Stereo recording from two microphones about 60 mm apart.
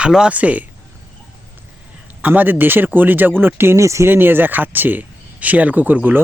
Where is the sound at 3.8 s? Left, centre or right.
Right.